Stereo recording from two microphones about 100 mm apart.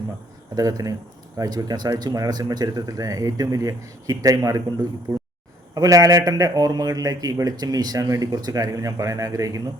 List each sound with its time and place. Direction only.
0.5 s a man's voice: 35° right (ahead or behind)